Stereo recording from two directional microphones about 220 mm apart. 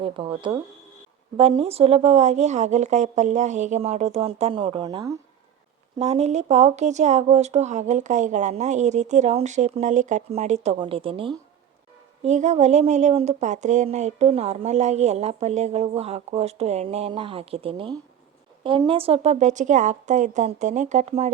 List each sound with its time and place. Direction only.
0.0 s a woman's voice: 20° right (ahead or behind)